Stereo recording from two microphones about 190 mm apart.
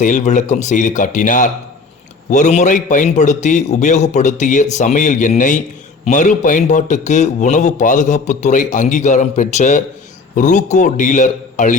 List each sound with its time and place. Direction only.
0.0 s speech: 40° left (ahead or behind)